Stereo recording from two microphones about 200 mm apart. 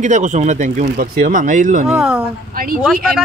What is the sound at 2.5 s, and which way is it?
Speech, 45° right (ahead or behind).